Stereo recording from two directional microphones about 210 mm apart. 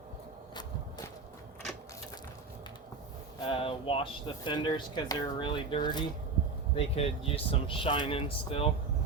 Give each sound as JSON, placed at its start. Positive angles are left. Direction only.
{"t": 3.4, "sound": "speech", "side_deg": 25}